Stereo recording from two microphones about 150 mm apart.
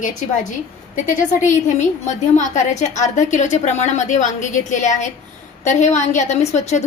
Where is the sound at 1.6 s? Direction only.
55° left (ahead or behind).